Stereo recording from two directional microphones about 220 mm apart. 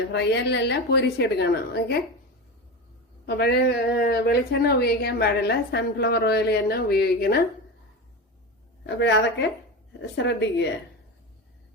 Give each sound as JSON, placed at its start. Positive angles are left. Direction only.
{"t": 0.1, "sound": "a woman's voice", "side_deg": 50}
{"t": 3.2, "sound": "a woman's voice", "side_deg": 45}
{"t": 9.0, "sound": "a woman's voice", "side_deg": 55}